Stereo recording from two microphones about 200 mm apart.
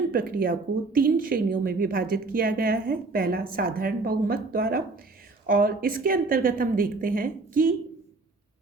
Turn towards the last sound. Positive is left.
turn(degrees=-45)  # may be behind; listen again after turning